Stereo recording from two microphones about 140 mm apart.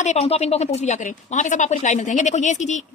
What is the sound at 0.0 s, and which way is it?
A woman's voice, 50° left (ahead or behind).